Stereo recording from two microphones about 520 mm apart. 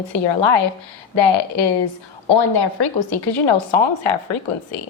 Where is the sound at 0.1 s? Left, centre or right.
Left.